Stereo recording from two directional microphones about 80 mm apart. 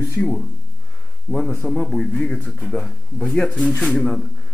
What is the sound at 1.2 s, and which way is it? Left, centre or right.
Speech, centre.